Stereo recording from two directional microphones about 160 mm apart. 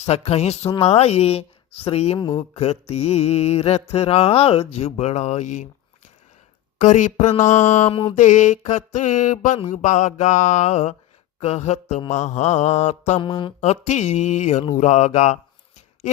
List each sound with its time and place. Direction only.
0.0 s mantra: 40° left (ahead or behind)
2.1 s speech: 25° left (ahead or behind)
2.6 s mantra: 40° left (ahead or behind)
6.7 s mantra: 50° left (ahead or behind)
7.9 s mantra: 35° left (ahead or behind)
8.1 s mantra: 50° left (ahead or behind)
13.1 s mantra: 30° left (ahead or behind)
13.6 s mantra: 45° left (ahead or behind)